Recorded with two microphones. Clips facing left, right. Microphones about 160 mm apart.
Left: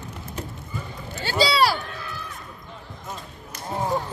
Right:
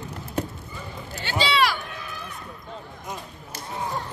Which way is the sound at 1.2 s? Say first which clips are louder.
Left 3 dB; 40° left (ahead or behind).